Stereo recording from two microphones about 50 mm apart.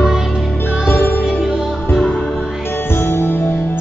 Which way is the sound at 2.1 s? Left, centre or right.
Centre.